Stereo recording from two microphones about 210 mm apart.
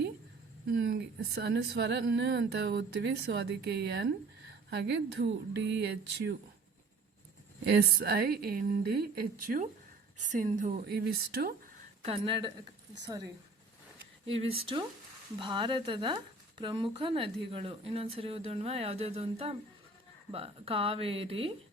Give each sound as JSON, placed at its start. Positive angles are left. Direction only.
{"t": 0.8, "sound": "a woman's voice", "side_deg": -60}
{"t": 7.6, "sound": "a woman's voice", "side_deg": -50}
{"t": 12.0, "sound": "speech", "side_deg": -25}